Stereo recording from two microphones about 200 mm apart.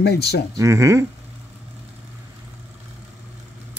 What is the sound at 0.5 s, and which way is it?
Speech, 15° right (ahead or behind).